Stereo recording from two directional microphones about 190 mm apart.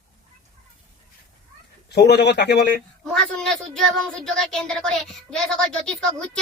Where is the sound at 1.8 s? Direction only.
60° left (ahead or behind).